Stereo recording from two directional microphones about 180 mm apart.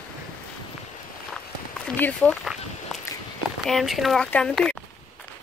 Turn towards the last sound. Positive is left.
turn(degrees=5)  # may be behind; listen again after turning